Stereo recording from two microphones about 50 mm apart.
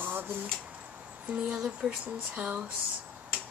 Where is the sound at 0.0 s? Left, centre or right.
Right.